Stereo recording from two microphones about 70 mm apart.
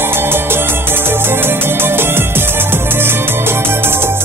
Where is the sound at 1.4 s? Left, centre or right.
Right.